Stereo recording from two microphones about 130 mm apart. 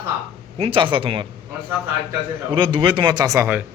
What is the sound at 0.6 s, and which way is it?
Speech, 40° right (ahead or behind).